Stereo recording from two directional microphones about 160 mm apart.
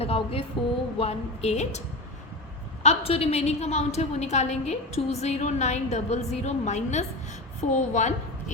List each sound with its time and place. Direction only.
0.0 s a sound: 35° left (ahead or behind)
0.9 s a woman's voice: 40° left (ahead or behind)
2.8 s a woman's voice: 40° left (ahead or behind)